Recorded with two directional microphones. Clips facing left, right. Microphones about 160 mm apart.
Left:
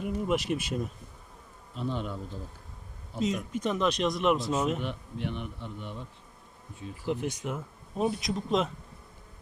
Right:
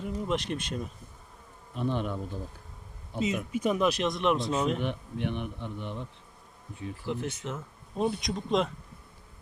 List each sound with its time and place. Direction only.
0.0 s speech: 10° left (ahead or behind)
1.7 s a man's voice: 60° right (ahead or behind)
3.2 s speech: 5° right (ahead or behind)
4.8 s a man's voice: 60° right (ahead or behind)
7.1 s speech: 15° left (ahead or behind)